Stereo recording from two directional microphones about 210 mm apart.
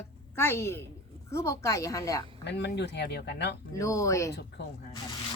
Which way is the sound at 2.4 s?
55° left (ahead or behind).